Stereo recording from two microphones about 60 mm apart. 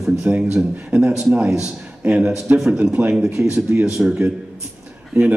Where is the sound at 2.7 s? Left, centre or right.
Right.